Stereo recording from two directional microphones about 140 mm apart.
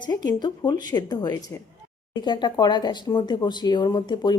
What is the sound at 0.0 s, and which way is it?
Speech, 30° left (ahead or behind).